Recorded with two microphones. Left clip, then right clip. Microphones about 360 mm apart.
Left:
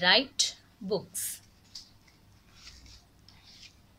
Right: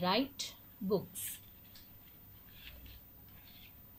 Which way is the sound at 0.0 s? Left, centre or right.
Left.